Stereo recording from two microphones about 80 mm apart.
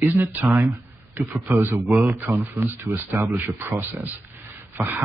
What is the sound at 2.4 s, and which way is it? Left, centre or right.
Speech, right.